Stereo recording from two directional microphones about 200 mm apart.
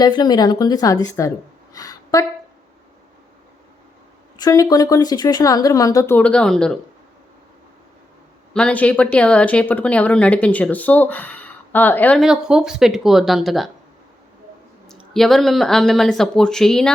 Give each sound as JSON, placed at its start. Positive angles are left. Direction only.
{"t": 0.0, "sound": "a woman's voice", "side_deg": 20}
{"t": 1.7, "sound": "a sound", "side_deg": 15}
{"t": 4.4, "sound": "speech", "side_deg": 20}
{"t": 8.5, "sound": "speech", "side_deg": 5}
{"t": 14.8, "sound": "speech", "side_deg": 0}